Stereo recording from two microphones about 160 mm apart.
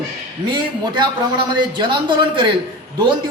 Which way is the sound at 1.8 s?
30° right (ahead or behind).